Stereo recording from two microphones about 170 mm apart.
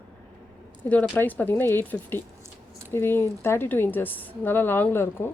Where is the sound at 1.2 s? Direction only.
10° left (ahead or behind).